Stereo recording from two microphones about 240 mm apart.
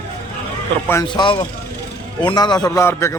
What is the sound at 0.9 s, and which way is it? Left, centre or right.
A man's voice, centre.